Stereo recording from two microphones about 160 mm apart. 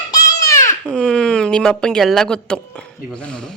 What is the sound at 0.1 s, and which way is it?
Baby cry, 20° left (ahead or behind).